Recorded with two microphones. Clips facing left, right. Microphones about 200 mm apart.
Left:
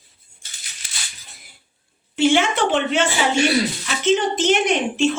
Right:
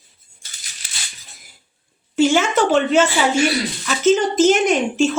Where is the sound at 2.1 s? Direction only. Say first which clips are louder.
Right 2 dB; 40° right (ahead or behind).